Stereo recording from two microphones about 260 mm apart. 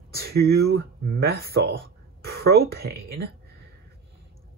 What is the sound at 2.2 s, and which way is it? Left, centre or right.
Speech, right.